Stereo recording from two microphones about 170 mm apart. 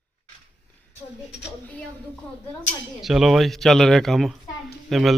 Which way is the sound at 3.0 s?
Centre (ahead or behind).